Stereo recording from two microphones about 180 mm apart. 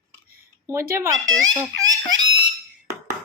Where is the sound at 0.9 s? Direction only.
15° right (ahead or behind).